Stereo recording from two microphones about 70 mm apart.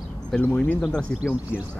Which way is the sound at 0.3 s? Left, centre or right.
Centre.